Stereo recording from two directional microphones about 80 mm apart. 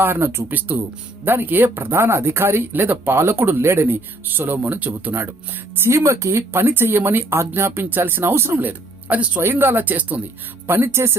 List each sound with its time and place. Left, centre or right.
0.0 s speech: right
10.7 s speech: right